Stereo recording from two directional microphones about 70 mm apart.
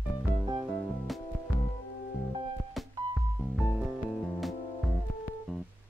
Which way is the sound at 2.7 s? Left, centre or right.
Centre.